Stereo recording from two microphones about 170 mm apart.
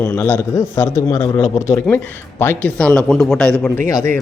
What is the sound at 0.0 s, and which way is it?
A man's voice, 10° left (ahead or behind).